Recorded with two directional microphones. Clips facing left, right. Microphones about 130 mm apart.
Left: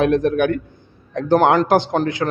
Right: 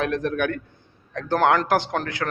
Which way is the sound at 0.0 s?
20° left (ahead or behind).